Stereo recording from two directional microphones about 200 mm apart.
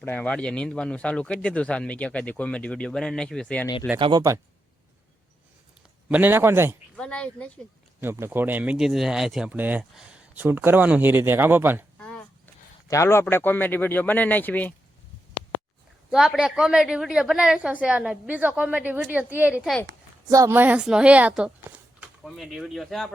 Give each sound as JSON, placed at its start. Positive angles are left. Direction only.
{"t": 0.0, "sound": "a woman's voice", "side_deg": 5}
{"t": 3.9, "sound": "speech", "side_deg": -20}
{"t": 6.1, "sound": "speech", "side_deg": -10}
{"t": 6.9, "sound": "a woman's voice", "side_deg": 5}
{"t": 8.0, "sound": "speech", "side_deg": -10}
{"t": 11.9, "sound": "a sound", "side_deg": 5}
{"t": 12.9, "sound": "speech", "side_deg": 15}
{"t": 16.0, "sound": "a woman's voice", "side_deg": 0}
{"t": 20.2, "sound": "a woman's voice", "side_deg": -15}